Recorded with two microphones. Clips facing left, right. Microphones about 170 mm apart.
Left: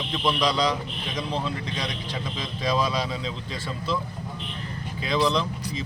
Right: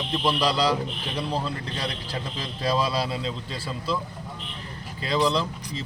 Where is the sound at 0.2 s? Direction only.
5° right (ahead or behind).